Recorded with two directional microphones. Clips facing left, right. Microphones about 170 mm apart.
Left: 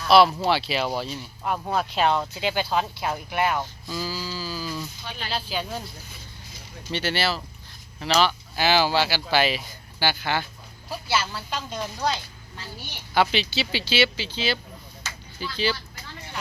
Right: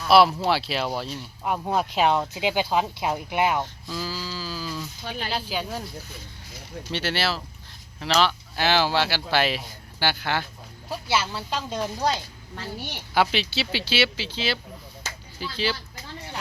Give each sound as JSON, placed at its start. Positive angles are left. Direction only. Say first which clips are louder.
{"t": 0.0, "sound": "speech", "louder": "even", "side_deg": -5}
{"t": 1.5, "sound": "speech", "louder": "right 1 dB", "side_deg": -10}
{"t": 3.6, "sound": "speech", "louder": "even", "side_deg": 5}
{"t": 5.0, "sound": "speech", "louder": "right 4 dB", "side_deg": -50}
{"t": 5.3, "sound": "speech", "louder": "left 1 dB", "side_deg": -10}
{"t": 6.9, "sound": "speech", "louder": "left 1 dB", "side_deg": 0}
{"t": 11.3, "sound": "speech", "louder": "right 3 dB", "side_deg": -30}
{"t": 13.1, "sound": "speech", "louder": "left 1 dB", "side_deg": 0}